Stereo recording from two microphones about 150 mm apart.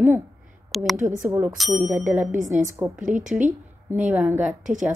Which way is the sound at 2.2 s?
55° right (ahead or behind).